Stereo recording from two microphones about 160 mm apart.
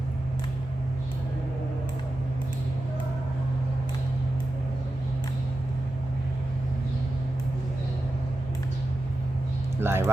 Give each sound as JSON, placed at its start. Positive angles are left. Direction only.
{"t": 9.8, "sound": "speech", "side_deg": -15}